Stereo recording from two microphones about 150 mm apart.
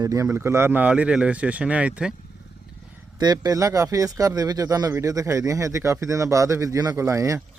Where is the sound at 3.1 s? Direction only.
25° right (ahead or behind).